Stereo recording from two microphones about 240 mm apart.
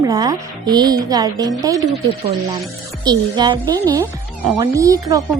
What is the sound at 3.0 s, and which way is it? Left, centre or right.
A woman's voice, centre.